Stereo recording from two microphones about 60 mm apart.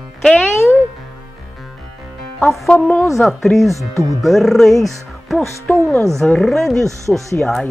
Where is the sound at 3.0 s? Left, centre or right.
Centre.